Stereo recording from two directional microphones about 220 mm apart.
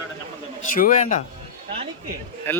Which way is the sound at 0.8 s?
35° left (ahead or behind).